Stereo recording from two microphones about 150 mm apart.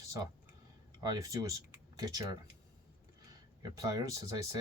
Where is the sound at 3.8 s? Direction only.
25° right (ahead or behind).